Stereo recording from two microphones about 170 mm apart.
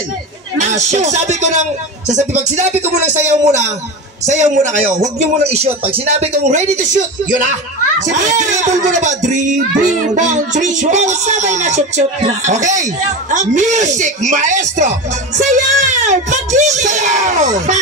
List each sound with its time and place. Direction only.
0.6 s speech: 45° right (ahead or behind)